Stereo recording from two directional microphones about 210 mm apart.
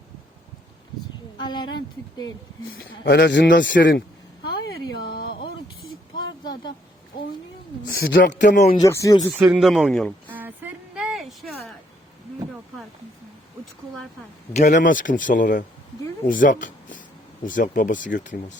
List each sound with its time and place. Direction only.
1.4 s speech: 20° left (ahead or behind)
2.8 s speech: 55° left (ahead or behind)
6.1 s a sound: 20° left (ahead or behind)
7.9 s speech: 50° left (ahead or behind)
8.7 s speech: 15° left (ahead or behind)
9.3 s speech: 5° right (ahead or behind)
10.2 s a sound: 10° right (ahead or behind)
14.5 s speech: 35° left (ahead or behind)